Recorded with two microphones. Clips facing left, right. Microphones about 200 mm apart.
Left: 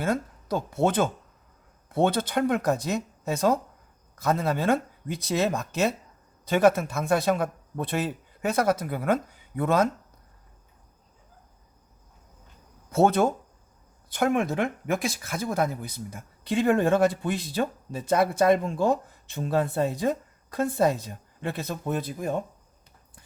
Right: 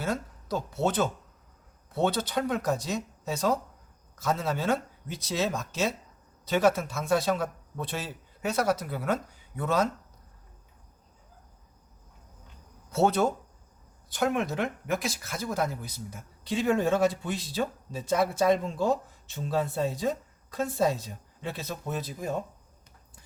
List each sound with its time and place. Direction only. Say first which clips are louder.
0.0 s speech: left 4 dB; 55° left (ahead or behind)
12.9 s speech: left 3 dB; 50° left (ahead or behind)